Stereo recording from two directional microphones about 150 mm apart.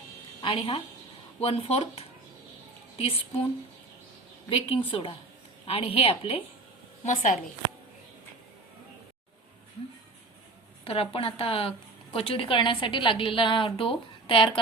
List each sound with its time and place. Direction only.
0.4 s a woman's voice: 35° left (ahead or behind)
4.4 s a woman's voice: 40° left (ahead or behind)
7.0 s a woman's voice: 55° left (ahead or behind)
10.8 s a woman's voice: 40° left (ahead or behind)